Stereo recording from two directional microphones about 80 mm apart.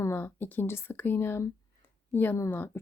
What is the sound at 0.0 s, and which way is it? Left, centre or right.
A woman's voice, left.